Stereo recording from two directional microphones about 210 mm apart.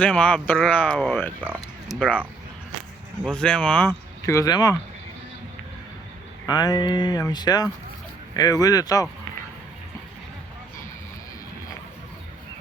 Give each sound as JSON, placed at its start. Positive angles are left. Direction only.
{"t": 0.0, "sound": "speech", "side_deg": 5}
{"t": 1.4, "sound": "speech", "side_deg": -5}
{"t": 3.2, "sound": "speech", "side_deg": 5}
{"t": 6.4, "sound": "speech", "side_deg": 20}